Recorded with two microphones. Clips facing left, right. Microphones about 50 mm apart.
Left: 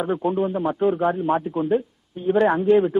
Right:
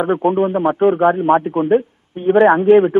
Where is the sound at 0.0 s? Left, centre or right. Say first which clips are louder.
Right 7 dB; right.